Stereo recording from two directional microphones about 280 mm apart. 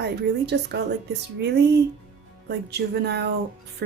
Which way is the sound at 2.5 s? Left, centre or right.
Right.